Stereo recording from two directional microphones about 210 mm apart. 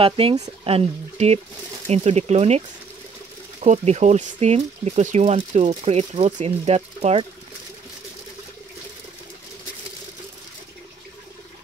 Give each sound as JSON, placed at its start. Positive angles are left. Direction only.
{"t": 0.0, "sound": "speech", "side_deg": -25}
{"t": 3.6, "sound": "speech", "side_deg": -30}